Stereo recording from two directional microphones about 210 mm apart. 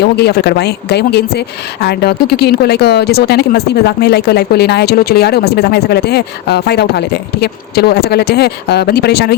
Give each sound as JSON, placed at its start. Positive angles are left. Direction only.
{"t": 0.0, "sound": "a woman's voice", "side_deg": 50}